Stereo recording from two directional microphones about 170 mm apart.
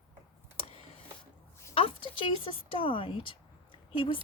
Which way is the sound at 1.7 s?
30° left (ahead or behind).